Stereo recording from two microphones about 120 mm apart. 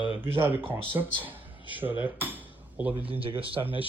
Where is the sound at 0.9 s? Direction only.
15° right (ahead or behind).